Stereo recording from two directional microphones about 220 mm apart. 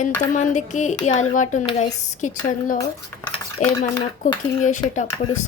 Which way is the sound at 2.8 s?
10° left (ahead or behind).